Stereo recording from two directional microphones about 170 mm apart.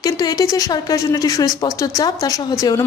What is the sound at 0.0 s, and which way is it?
A woman's voice, 20° left (ahead or behind).